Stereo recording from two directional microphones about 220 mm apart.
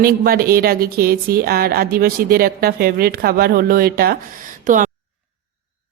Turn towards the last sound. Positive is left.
turn(degrees=-35)  # may be behind; listen again after turning